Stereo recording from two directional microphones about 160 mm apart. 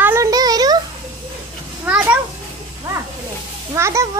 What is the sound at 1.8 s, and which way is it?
Speech, 10° right (ahead or behind).